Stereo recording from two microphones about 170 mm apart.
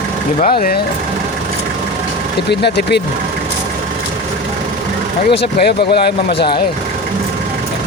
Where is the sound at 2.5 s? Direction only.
75° left (ahead or behind).